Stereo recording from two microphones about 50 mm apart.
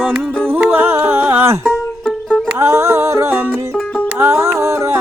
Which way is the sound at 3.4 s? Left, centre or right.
Right.